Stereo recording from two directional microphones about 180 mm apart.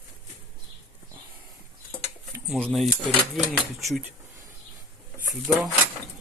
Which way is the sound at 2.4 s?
Centre (ahead or behind).